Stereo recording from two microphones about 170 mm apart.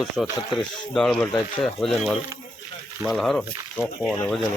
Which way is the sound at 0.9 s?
5° left (ahead or behind).